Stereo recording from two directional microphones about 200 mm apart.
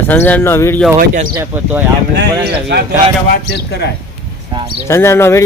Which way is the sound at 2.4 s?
55° right (ahead or behind).